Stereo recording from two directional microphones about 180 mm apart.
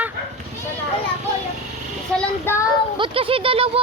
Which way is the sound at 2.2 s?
10° left (ahead or behind).